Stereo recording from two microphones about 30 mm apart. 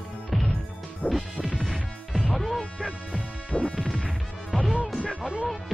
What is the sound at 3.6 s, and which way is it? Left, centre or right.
Music, left.